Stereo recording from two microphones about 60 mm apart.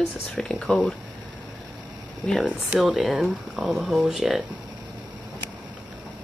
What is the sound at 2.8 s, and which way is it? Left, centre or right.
Speech, centre.